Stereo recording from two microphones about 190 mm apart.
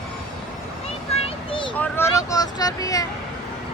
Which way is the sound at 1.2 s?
25° left (ahead or behind).